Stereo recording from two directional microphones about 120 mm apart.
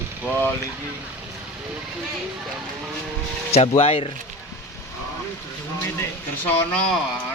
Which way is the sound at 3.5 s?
55° left (ahead or behind).